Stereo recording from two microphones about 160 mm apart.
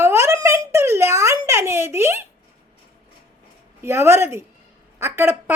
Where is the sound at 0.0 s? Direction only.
15° right (ahead or behind).